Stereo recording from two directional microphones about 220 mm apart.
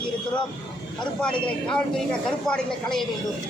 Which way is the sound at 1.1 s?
5° left (ahead or behind).